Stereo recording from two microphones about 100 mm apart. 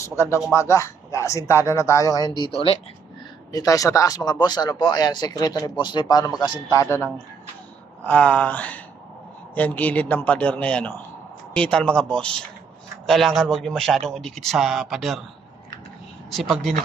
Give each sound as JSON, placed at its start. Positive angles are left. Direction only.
{"t": 0.0, "sound": "speech", "side_deg": 30}
{"t": 2.5, "sound": "speech", "side_deg": 75}
{"t": 3.5, "sound": "speech", "side_deg": 35}
{"t": 5.7, "sound": "speech", "side_deg": 55}
{"t": 6.7, "sound": "speech", "side_deg": 30}
{"t": 8.0, "sound": "a man's voice", "side_deg": 10}
{"t": 16.3, "sound": "speech", "side_deg": 0}